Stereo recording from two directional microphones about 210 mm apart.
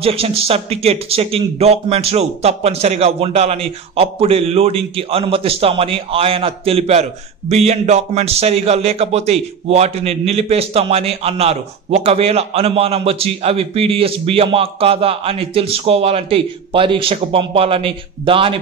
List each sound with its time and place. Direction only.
0.0 s speech: 25° right (ahead or behind)